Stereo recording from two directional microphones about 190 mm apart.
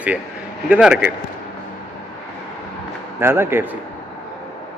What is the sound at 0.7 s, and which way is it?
Speech, 5° right (ahead or behind).